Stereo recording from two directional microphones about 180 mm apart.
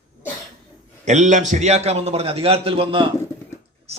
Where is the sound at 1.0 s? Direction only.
40° right (ahead or behind).